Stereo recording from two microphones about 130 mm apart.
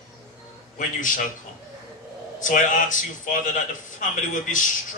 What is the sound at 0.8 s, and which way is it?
Speech, 85° left.